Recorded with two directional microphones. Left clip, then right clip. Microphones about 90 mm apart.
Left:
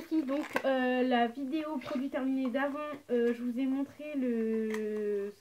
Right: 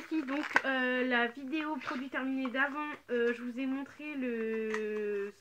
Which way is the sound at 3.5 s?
20° left (ahead or behind).